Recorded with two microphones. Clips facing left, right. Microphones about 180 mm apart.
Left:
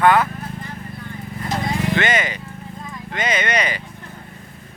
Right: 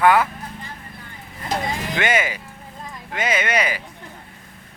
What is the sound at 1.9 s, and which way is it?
Speech, 10° right (ahead or behind).